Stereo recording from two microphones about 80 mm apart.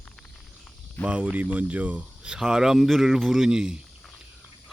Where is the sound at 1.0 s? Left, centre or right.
Centre.